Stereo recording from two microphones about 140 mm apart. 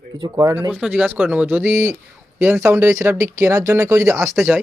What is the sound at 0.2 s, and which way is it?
Speech, 25° right (ahead or behind).